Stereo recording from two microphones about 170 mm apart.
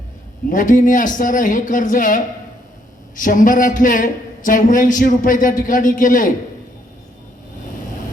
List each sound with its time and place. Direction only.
0.5 s a man's voice: 50° left (ahead or behind)